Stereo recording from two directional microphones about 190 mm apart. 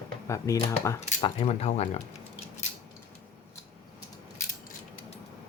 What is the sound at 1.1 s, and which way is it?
Speech, 25° left (ahead or behind).